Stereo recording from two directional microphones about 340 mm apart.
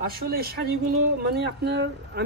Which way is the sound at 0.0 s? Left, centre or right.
Right.